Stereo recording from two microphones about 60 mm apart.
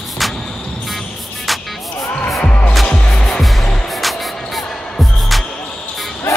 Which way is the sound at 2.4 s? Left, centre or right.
Left.